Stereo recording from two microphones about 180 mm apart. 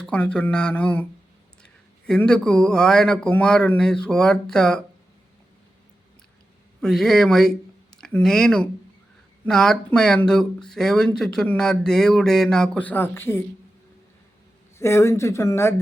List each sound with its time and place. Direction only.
0.0 s speech: 5° left (ahead or behind)
6.8 s speech: centre (ahead or behind)
14.8 s speech: 15° left (ahead or behind)